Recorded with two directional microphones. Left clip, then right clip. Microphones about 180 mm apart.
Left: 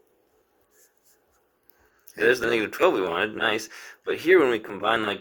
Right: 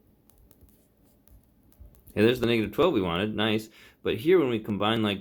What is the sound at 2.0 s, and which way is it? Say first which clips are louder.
Speech: left 2 dB; 25° left (ahead or behind).